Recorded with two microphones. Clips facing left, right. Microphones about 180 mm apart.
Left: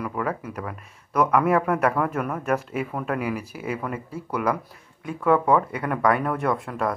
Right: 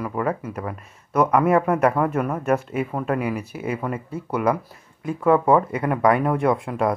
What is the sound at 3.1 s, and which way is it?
Speech, 5° left (ahead or behind).